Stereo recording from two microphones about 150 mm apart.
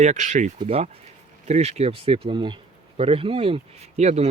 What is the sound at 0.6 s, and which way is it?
Speech, 40° right (ahead or behind).